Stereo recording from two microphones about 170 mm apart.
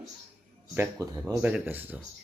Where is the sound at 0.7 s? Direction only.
15° right (ahead or behind).